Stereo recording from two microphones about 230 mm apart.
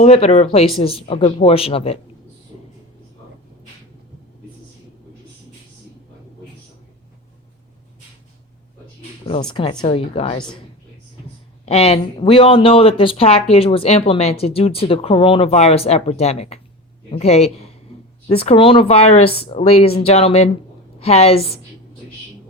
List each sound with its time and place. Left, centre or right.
0.0 s speech: left
9.2 s speech: left
11.6 s speech: left